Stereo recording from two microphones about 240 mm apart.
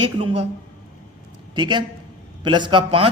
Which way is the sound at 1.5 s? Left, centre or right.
Centre.